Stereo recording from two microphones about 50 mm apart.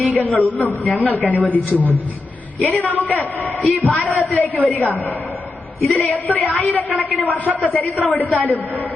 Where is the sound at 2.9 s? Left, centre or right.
Left.